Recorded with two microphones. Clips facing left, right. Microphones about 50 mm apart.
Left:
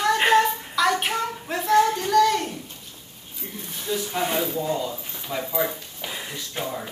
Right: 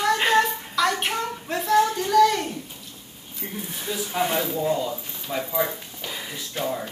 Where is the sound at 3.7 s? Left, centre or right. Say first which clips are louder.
Left 3 dB; centre.